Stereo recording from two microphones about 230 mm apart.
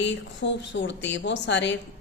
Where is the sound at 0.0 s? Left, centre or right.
Left.